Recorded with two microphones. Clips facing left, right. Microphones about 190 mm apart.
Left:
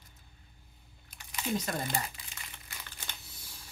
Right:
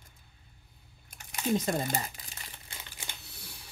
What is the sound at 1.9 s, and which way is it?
Crumpling, 35° right (ahead or behind).